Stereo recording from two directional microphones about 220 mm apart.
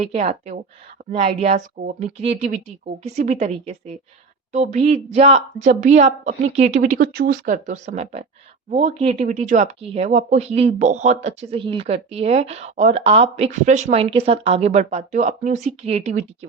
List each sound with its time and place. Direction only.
0.0 s speech: 30° right (ahead or behind)